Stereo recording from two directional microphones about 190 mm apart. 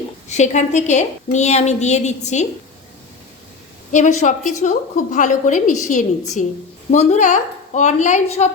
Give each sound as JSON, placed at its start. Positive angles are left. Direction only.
{"t": 0.3, "sound": "a woman's voice", "side_deg": 40}
{"t": 3.9, "sound": "a woman's voice", "side_deg": 40}